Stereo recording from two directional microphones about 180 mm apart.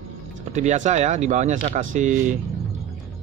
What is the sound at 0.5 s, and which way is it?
Speech, 40° right (ahead or behind).